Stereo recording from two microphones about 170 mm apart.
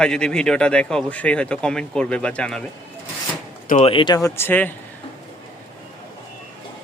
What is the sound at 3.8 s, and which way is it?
Speech, 30° left (ahead or behind).